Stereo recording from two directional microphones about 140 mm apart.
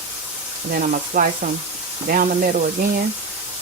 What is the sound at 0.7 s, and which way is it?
Speech, 80° right.